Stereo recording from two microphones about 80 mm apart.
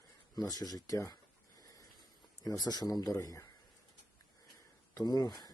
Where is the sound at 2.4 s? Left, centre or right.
Left.